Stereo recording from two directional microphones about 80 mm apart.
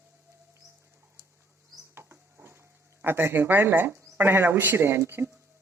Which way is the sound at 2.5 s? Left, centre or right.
Right.